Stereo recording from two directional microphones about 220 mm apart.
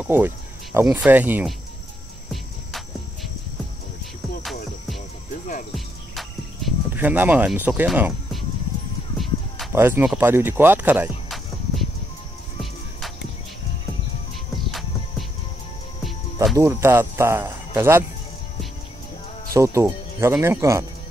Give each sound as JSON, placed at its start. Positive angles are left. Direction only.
{"t": 0.0, "sound": "speech", "side_deg": -10}
{"t": 5.3, "sound": "music", "side_deg": 35}
{"t": 6.1, "sound": "a sound", "side_deg": -5}
{"t": 9.8, "sound": "speech", "side_deg": -10}
{"t": 14.7, "sound": "music", "side_deg": 0}
{"t": 16.5, "sound": "speech", "side_deg": -10}
{"t": 19.5, "sound": "speech", "side_deg": -15}